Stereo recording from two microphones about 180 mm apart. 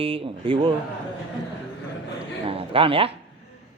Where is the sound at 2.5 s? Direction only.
30° right (ahead or behind).